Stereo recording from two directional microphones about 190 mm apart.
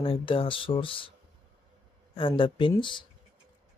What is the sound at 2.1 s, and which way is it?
Speech, 25° left (ahead or behind).